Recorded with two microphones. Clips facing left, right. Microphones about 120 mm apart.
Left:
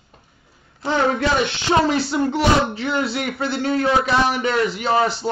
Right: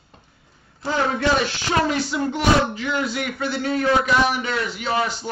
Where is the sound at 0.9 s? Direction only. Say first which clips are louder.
Left 2 dB; 20° left (ahead or behind).